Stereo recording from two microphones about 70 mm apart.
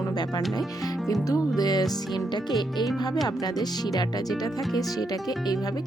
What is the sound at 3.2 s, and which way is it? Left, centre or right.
Speech, left.